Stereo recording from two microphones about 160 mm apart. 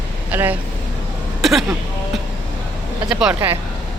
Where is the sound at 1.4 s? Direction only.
Centre (ahead or behind).